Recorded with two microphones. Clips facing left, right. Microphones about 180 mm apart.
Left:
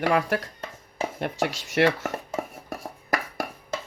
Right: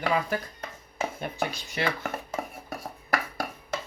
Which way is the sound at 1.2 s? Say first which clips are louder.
Left 4 dB; 90° left.